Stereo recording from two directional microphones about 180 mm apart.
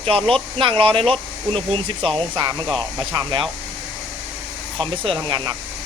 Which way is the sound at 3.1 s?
25° right (ahead or behind).